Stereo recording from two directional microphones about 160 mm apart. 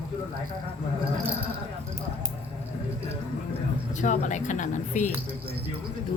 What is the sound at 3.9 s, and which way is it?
Speech, 50° left (ahead or behind).